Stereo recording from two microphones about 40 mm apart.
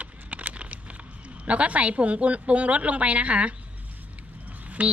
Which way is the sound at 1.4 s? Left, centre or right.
Right.